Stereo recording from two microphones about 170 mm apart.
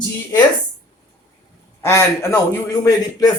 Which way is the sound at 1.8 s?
15° left (ahead or behind).